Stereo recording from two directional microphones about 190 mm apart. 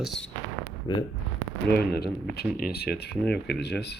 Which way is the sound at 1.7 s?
55° left (ahead or behind).